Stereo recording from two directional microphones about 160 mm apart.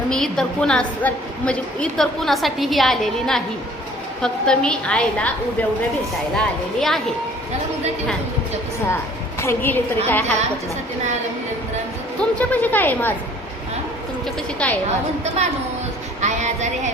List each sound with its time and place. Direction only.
0.1 s a woman's voice: 5° left (ahead or behind)
9.4 s a woman's voice: 15° left (ahead or behind)
12.4 s a woman's voice: 10° left (ahead or behind)
14.6 s a woman's voice: 5° left (ahead or behind)
16.2 s female singing: 45° right (ahead or behind)